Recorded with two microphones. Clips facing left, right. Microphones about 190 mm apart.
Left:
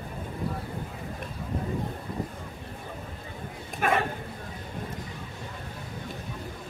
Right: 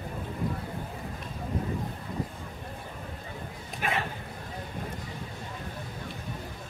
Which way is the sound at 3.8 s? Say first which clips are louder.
Left 6 dB; 50° left (ahead or behind).